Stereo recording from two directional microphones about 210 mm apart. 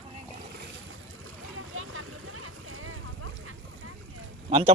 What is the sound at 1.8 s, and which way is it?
Vehicle, 90° right.